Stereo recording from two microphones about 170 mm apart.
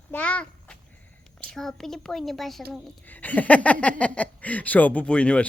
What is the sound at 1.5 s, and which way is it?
Speech, centre (ahead or behind).